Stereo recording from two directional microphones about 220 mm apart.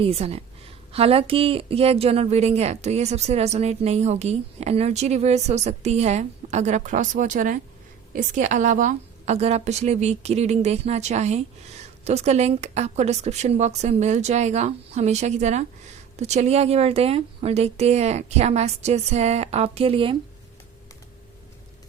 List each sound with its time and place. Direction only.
0.0 s a woman's voice: 25° right (ahead or behind)